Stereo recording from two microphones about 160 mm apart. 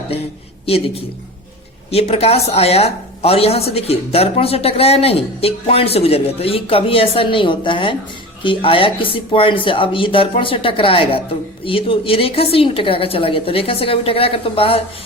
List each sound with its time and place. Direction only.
1.9 s speech: 40° left (ahead or behind)